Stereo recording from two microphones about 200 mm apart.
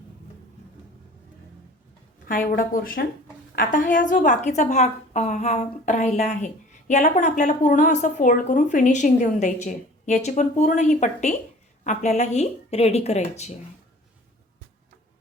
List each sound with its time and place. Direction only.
2.6 s a woman's voice: 45° left (ahead or behind)